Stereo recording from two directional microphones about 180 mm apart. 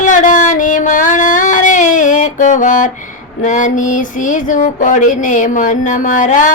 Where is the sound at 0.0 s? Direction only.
45° left (ahead or behind).